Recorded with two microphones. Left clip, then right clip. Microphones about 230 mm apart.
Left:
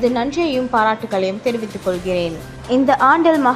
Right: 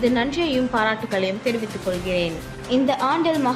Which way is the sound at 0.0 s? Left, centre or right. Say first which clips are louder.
Left 3 dB; left.